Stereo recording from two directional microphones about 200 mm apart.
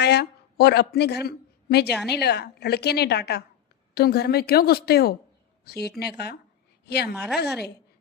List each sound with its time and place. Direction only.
0.0 s a woman's voice: 55° left (ahead or behind)
7.1 s a woman's voice: 5° right (ahead or behind)